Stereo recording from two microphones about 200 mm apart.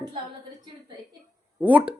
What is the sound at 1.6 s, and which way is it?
Speech, 5° right (ahead or behind).